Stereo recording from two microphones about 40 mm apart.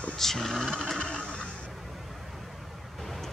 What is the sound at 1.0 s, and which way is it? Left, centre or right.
Vehicle, centre.